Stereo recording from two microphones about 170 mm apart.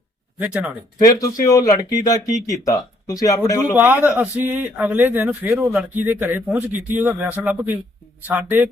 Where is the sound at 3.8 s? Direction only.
10° right (ahead or behind).